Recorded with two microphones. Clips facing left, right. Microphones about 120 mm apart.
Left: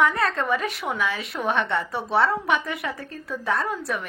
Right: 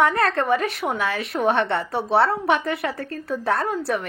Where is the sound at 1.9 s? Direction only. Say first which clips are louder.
Right 3 dB; 30° right (ahead or behind).